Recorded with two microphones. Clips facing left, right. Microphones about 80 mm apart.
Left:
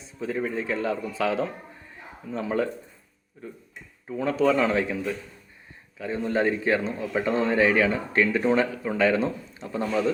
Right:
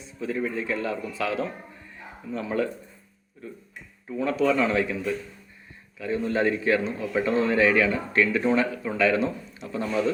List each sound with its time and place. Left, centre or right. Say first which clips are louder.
0.2 s speech: even; left
4.1 s a man's voice: left 1 dB; left